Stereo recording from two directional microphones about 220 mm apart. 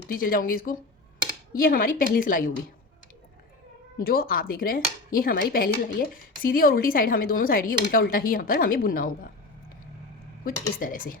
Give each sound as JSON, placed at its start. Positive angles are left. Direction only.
{"t": 0.1, "sound": "a woman's voice", "side_deg": 40}
{"t": 3.9, "sound": "a woman's voice", "side_deg": 40}
{"t": 10.4, "sound": "a woman's voice", "side_deg": 40}